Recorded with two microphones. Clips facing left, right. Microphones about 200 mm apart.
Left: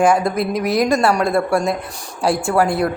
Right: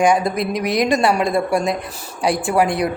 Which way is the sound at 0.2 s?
Centre (ahead or behind).